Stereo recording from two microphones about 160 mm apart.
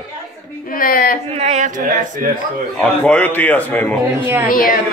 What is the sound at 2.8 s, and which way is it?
A man's voice, 5° left (ahead or behind).